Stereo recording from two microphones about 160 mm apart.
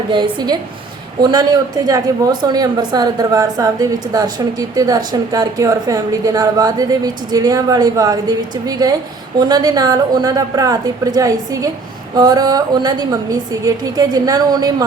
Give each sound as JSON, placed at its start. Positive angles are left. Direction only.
{"t": 0.1, "sound": "a woman's voice", "side_deg": -25}